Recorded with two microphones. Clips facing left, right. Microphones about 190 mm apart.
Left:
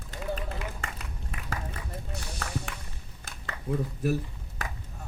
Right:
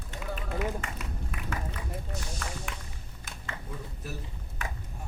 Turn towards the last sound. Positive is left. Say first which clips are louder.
# left 12 dB
turn(degrees=55)  # may be behind; listen again after turning